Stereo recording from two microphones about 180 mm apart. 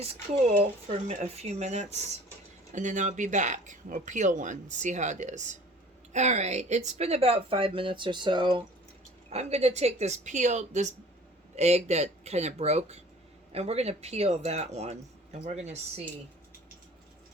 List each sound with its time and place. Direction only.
0.0 s speech: 35° right (ahead or behind)
9.3 s speech: 35° right (ahead or behind)